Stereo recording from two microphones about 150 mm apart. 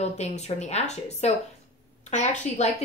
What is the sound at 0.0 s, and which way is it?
A woman's voice, 45° left (ahead or behind).